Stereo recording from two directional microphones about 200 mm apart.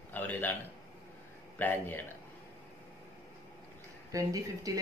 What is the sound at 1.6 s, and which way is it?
Speech, 10° left (ahead or behind).